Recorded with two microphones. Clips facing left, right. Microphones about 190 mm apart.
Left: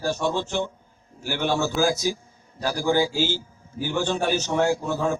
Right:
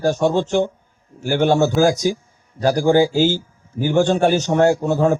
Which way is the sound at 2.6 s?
45° right (ahead or behind).